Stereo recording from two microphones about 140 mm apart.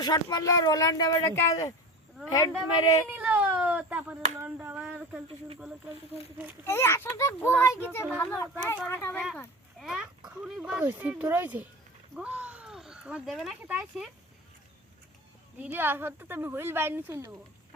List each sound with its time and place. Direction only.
0.0 s speech: 30° left (ahead or behind)
3.1 s speech: 10° right (ahead or behind)
6.7 s a child's voice: 15° left (ahead or behind)
9.8 s speech: 5° right (ahead or behind)
15.5 s speech: 15° right (ahead or behind)